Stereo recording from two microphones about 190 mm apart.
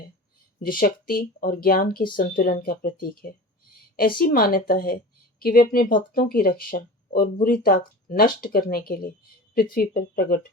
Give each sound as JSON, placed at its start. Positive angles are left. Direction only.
{"t": 0.6, "sound": "speech", "side_deg": 50}